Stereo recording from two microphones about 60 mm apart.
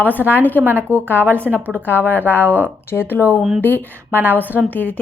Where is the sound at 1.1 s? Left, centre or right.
Left.